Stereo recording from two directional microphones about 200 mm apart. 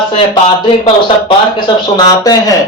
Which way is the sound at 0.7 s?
25° left (ahead or behind).